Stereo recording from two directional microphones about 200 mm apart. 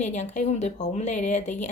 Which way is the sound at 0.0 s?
35° left (ahead or behind).